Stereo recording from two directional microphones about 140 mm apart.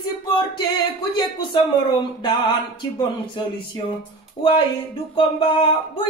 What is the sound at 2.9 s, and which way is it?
Speech, 35° left (ahead or behind).